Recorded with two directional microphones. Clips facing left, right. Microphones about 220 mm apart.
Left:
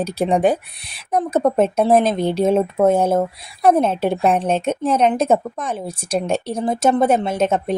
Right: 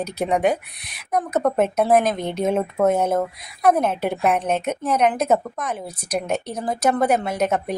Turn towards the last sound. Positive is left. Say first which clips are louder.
# left 3 dB
turn(degrees=25)  # may be behind; listen again after turning